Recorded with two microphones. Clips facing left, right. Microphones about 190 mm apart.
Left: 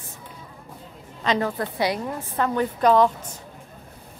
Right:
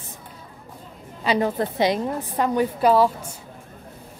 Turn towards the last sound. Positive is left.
turn(degrees=-5)  # may be behind; listen again after turning